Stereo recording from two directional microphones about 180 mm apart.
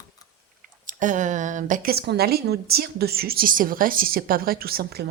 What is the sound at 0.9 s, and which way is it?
A woman's voice, 45° right (ahead or behind).